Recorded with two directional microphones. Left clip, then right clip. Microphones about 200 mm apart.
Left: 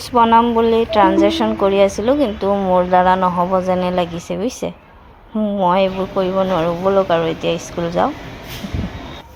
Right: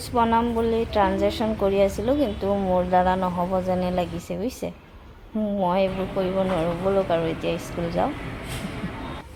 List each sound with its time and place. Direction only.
0.1 s a woman's voice: 20° left (ahead or behind)